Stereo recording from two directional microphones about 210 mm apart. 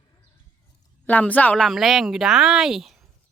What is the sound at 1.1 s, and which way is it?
Speech, 5° left (ahead or behind).